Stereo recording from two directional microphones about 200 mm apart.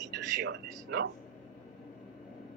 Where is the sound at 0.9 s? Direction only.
50° right (ahead or behind).